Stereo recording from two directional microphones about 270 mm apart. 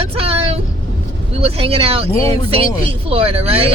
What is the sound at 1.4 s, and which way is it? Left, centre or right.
Speech, right.